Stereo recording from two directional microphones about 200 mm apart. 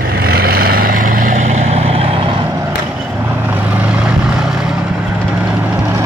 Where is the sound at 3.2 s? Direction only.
10° right (ahead or behind).